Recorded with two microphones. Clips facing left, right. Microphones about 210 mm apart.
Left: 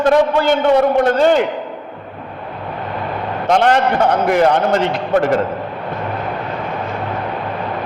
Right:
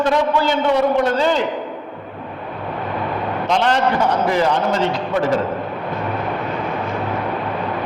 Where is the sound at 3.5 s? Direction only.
55° left (ahead or behind).